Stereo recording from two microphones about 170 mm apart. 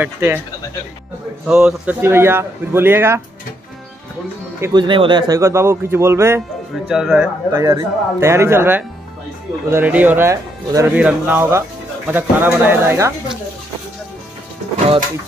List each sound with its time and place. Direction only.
0.0 s speech: 15° right (ahead or behind)
1.5 s speech: 5° right (ahead or behind)
4.6 s speech: 15° right (ahead or behind)
4.8 s speech: 30° right (ahead or behind)
6.9 s speech: 5° right (ahead or behind)
7.5 s speech: 15° right (ahead or behind)